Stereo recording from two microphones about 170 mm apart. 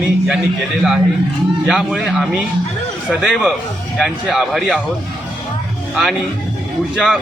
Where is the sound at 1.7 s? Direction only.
5° right (ahead or behind).